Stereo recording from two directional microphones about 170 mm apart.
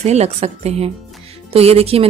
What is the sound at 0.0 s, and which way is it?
Speech, 40° right (ahead or behind).